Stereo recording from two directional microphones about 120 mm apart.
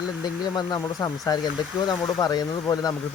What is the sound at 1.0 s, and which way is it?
Speech, 30° left (ahead or behind).